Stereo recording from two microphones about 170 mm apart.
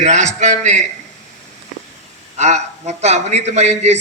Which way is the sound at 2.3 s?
40° right (ahead or behind).